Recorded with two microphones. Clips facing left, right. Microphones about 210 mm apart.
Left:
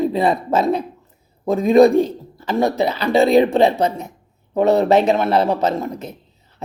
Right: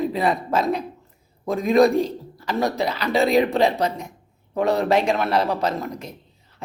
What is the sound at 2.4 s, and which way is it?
Speech, 25° left (ahead or behind).